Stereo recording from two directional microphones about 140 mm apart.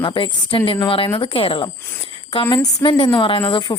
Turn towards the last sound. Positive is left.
turn(degrees=30)  # may be behind; listen again after turning